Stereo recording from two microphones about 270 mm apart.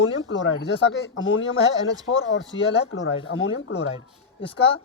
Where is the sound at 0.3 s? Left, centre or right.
Left.